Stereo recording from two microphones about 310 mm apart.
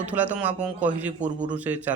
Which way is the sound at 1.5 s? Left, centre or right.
Centre.